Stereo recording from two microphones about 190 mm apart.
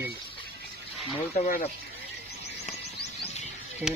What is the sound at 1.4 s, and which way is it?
Speech, 40° left (ahead or behind).